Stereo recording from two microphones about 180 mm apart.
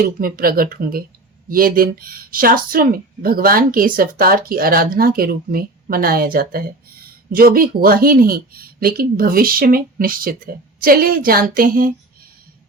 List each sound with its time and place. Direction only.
0.2 s a woman's voice: 55° right (ahead or behind)